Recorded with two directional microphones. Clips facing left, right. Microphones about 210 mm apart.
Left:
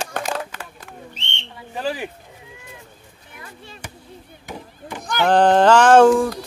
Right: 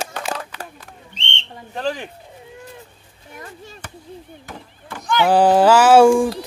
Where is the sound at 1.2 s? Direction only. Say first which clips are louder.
Right 2 dB; 5° left (ahead or behind).